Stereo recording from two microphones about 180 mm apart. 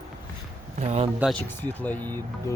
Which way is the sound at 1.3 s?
10° left (ahead or behind).